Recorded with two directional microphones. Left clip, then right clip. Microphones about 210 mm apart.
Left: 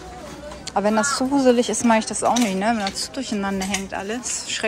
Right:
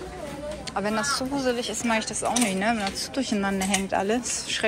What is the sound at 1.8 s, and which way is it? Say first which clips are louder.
Speech: left 5 dB; 25° left (ahead or behind).